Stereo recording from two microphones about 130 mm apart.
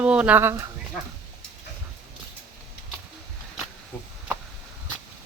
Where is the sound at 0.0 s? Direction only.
10° right (ahead or behind).